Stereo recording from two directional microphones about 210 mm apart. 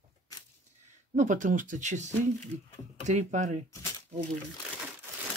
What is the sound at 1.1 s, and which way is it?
Speech, 35° right (ahead or behind).